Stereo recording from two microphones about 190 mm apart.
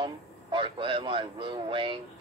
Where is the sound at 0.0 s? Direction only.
25° right (ahead or behind).